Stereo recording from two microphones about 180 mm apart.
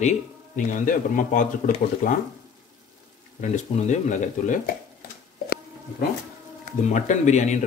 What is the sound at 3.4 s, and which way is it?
Speech, 40° left (ahead or behind).